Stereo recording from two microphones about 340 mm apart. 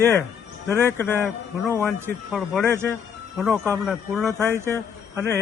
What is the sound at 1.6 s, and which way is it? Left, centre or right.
Speech, centre.